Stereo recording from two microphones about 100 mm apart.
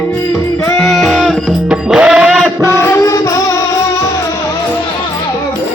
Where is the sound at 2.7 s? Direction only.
25° left (ahead or behind).